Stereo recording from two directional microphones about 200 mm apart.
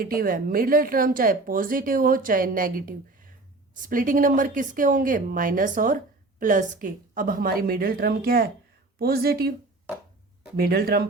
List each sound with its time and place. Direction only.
0.0 s a woman's voice: 45° right (ahead or behind)
10.6 s a woman's voice: 50° right (ahead or behind)